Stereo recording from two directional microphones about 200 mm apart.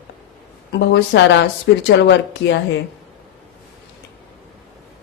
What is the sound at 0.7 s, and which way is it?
Speech, 60° left (ahead or behind).